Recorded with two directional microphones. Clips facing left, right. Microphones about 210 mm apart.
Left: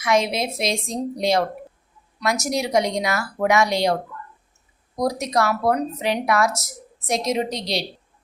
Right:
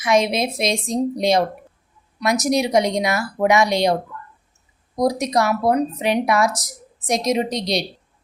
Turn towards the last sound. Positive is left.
turn(degrees=-15)  # may be behind; listen again after turning